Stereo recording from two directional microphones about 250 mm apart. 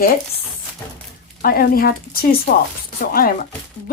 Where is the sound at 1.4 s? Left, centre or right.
Left.